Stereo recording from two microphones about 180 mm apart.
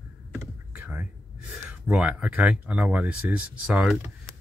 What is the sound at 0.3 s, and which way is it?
Computer keyboard, 10° right (ahead or behind).